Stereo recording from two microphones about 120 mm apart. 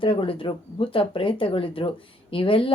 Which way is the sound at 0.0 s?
45° left (ahead or behind).